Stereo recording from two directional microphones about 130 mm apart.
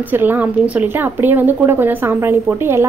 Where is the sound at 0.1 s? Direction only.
15° right (ahead or behind).